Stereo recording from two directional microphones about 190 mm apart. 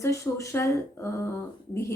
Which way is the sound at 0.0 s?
15° left (ahead or behind).